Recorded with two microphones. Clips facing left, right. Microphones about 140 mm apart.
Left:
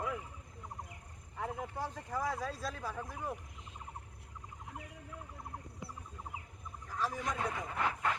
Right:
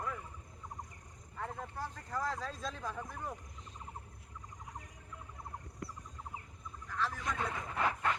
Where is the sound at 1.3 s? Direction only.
10° left (ahead or behind).